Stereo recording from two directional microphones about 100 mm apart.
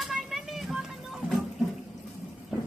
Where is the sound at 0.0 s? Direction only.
Centre (ahead or behind).